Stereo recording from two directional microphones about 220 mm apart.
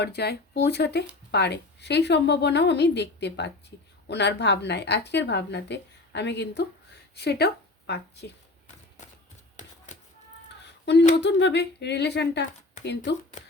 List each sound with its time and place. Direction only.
0.0 s speech: 50° left (ahead or behind)
10.6 s a sound: 50° left (ahead or behind)
11.2 s speech: 55° left (ahead or behind)